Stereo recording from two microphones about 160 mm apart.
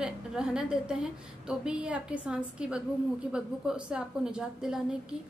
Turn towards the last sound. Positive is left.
turn(degrees=-5)  # may be behind; listen again after turning